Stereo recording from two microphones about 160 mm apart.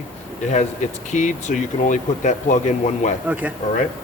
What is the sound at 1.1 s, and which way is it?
Speech, 50° left (ahead or behind).